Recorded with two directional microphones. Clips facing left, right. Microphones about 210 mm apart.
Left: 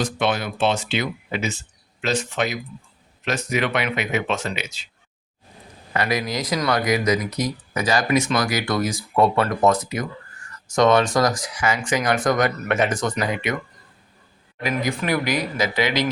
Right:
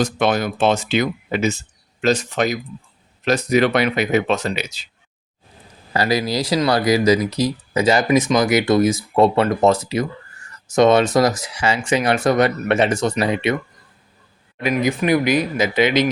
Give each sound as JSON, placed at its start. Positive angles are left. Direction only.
{"t": 0.0, "sound": "speech", "side_deg": -40}
{"t": 5.9, "sound": "speech", "side_deg": -35}
{"t": 14.6, "sound": "speech", "side_deg": -20}